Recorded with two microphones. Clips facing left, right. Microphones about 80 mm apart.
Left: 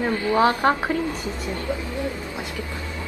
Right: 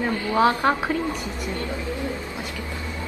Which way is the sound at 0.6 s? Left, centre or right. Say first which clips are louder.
Left 1 dB; left.